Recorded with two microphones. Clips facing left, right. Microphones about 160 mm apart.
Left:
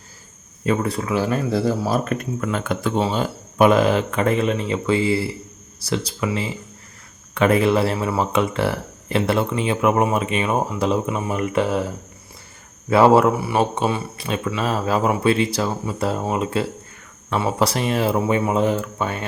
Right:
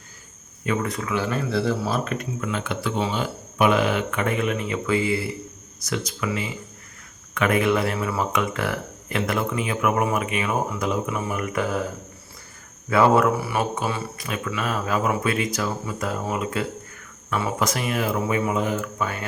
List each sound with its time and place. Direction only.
0.6 s speech: 30° left (ahead or behind)
12.9 s speech: 25° left (ahead or behind)